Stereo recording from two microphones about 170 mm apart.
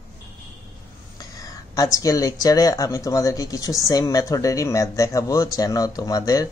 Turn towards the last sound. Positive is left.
turn(degrees=20)  # may be behind; listen again after turning